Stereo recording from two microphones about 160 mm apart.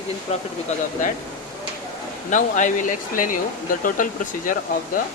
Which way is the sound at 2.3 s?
55° left (ahead or behind).